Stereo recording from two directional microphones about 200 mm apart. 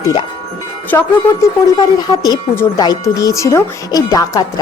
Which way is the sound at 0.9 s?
15° left (ahead or behind).